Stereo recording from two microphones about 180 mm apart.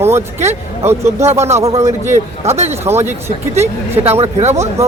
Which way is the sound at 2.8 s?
15° right (ahead or behind).